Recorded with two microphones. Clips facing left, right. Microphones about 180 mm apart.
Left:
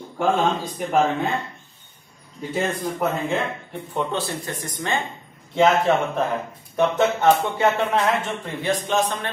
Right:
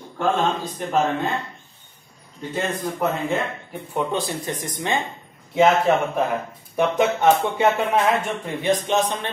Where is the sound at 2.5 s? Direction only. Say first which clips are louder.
Left 1 dB; centre (ahead or behind).